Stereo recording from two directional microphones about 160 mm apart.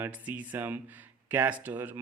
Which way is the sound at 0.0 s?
10° right (ahead or behind).